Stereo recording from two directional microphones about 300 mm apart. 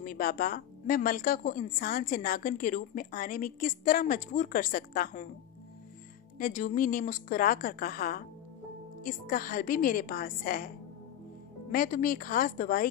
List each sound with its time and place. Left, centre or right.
0.0 s a woman's voice: left
6.3 s a woman's voice: left
11.7 s a woman's voice: left